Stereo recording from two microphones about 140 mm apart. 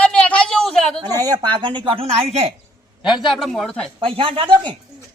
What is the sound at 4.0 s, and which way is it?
Speech, 40° right (ahead or behind).